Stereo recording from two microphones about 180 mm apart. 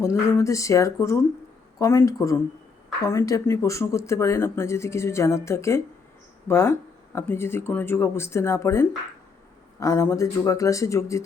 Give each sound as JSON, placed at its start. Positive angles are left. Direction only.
{"t": 0.0, "sound": "speech", "side_deg": 15}